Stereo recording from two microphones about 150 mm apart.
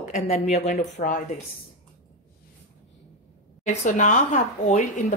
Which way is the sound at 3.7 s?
55° left (ahead or behind).